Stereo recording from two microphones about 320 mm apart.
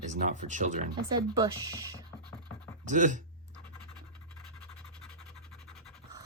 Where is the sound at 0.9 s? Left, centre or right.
Centre.